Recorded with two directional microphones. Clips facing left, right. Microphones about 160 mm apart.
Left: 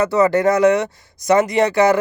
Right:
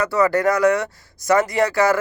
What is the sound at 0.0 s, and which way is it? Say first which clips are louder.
Speech: left 3 dB; 20° left (ahead or behind).